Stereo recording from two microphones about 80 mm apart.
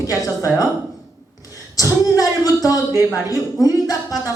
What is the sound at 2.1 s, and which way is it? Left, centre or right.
Speech, left.